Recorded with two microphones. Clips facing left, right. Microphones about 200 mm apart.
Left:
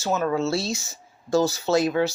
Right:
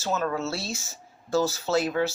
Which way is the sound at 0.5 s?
90° left.